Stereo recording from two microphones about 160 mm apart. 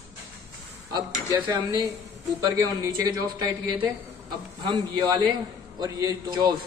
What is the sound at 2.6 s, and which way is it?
A man's voice, 25° right (ahead or behind).